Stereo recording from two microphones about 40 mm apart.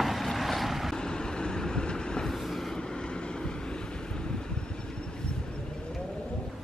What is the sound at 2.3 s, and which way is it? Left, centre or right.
Vehicle, centre.